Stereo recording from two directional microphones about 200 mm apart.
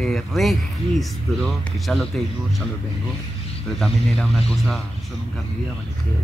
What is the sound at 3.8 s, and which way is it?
Speech, centre (ahead or behind).